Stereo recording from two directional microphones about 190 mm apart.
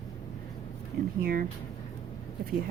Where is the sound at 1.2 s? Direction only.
50° right (ahead or behind).